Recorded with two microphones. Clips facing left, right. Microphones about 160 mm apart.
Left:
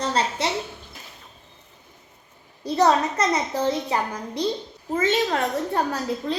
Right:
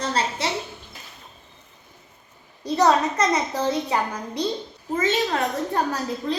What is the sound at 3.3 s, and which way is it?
Speech, 25° left (ahead or behind).